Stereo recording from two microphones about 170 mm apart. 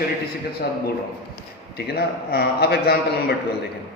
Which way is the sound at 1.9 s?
65° left (ahead or behind).